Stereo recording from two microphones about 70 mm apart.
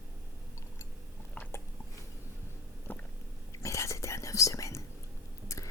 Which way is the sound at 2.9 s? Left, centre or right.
Left.